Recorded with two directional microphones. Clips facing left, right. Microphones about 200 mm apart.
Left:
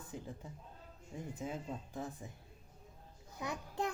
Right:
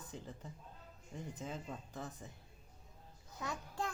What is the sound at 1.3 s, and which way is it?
Speech, 10° left (ahead or behind).